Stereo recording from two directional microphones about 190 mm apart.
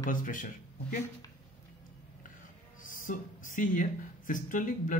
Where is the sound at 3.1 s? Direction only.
45° left (ahead or behind).